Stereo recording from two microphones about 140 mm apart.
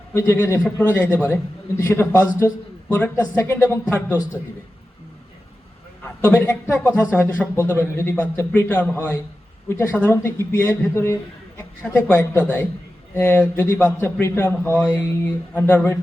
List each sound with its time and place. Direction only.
0.1 s a man's voice: 15° left (ahead or behind)
6.2 s a man's voice: 10° left (ahead or behind)